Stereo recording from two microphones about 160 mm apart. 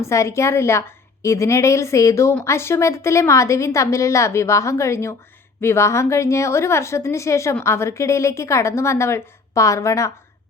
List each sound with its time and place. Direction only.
0.0 s a woman's voice: 15° left (ahead or behind)